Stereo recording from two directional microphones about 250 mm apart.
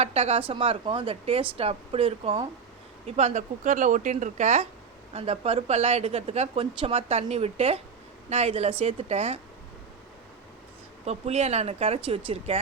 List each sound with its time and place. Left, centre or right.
0.0 s speech: right
11.0 s speech: right